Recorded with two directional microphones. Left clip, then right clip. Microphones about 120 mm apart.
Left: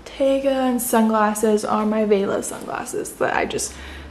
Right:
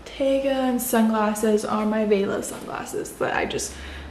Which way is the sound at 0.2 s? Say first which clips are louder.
Left 3 dB; 15° left (ahead or behind).